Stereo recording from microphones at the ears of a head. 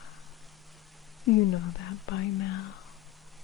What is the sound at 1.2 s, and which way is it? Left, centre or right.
Speech, left.